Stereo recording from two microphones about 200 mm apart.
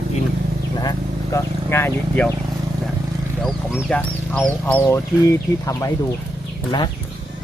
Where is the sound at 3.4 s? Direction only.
Centre (ahead or behind).